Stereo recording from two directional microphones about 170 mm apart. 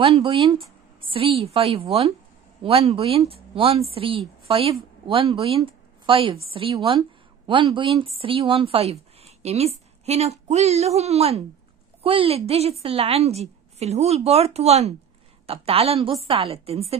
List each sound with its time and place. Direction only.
0.2 s a woman's voice: 25° right (ahead or behind)
5.6 s a sound: 30° right (ahead or behind)
6.5 s a woman's voice: 30° right (ahead or behind)